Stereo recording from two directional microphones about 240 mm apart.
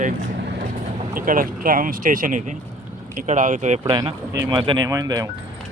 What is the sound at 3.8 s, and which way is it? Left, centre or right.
Speech, centre.